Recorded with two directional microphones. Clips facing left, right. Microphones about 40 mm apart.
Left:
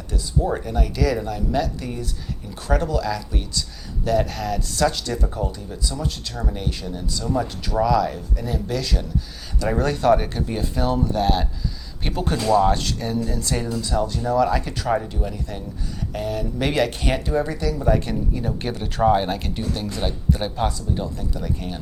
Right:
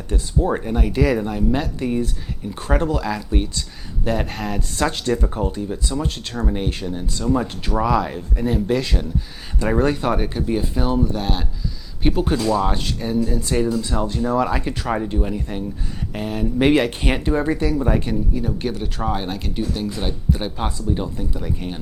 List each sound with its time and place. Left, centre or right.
0.1 s speech: right
13.8 s speech: right
15.1 s speech: right
18.1 s speech: centre
20.7 s speech: right